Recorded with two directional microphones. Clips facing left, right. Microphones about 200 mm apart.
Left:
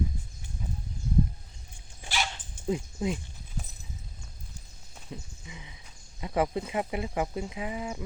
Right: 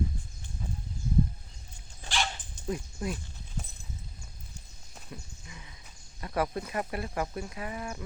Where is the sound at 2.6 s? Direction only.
20° left (ahead or behind).